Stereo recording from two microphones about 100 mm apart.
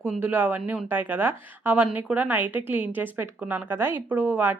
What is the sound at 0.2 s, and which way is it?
A woman's voice, 20° right (ahead or behind).